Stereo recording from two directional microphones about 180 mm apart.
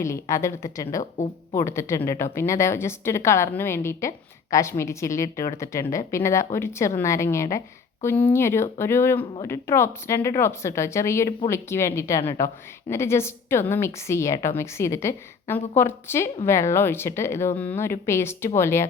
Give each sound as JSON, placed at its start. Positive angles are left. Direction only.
{"t": 0.0, "sound": "a woman's voice", "side_deg": 15}